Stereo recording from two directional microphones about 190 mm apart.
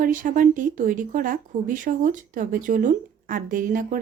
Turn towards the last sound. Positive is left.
turn(degrees=-45)  # may be behind; listen again after turning